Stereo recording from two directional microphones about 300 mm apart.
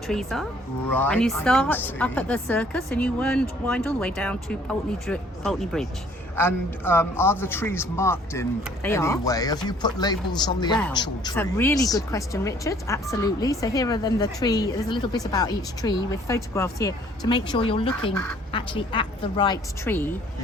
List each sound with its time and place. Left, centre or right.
0.1 s a woman's voice: centre